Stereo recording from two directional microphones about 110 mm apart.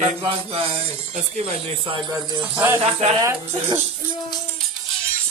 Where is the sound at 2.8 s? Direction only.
70° right (ahead or behind).